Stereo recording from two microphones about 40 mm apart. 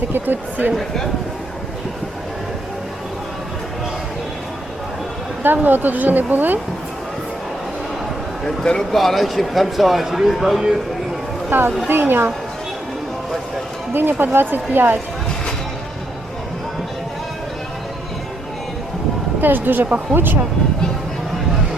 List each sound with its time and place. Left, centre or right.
0.1 s speech: right
5.4 s speech: right
8.4 s a man's voice: centre
8.9 s a man's voice: centre
11.5 s speech: right
13.9 s speech: right
19.4 s speech: right